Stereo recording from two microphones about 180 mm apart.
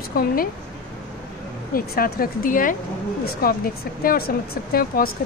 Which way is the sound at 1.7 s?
55° left (ahead or behind).